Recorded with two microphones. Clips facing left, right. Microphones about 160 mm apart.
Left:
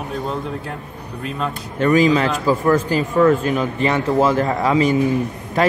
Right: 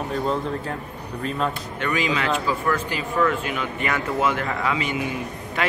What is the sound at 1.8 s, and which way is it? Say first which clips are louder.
Speech: left 10 dB; 40° left (ahead or behind).